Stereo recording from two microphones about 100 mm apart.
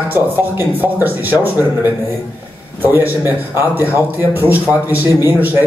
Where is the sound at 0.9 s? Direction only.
20° right (ahead or behind).